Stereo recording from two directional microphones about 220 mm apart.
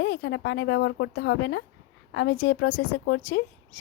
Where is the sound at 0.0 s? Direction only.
55° left (ahead or behind).